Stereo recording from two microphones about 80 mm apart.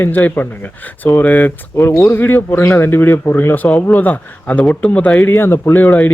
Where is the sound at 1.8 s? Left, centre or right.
Left.